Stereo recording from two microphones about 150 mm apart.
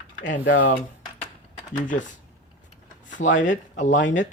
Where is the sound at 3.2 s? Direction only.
55° left (ahead or behind).